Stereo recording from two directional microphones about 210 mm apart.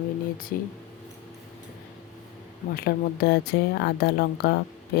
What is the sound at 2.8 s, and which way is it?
Speech, 50° left (ahead or behind).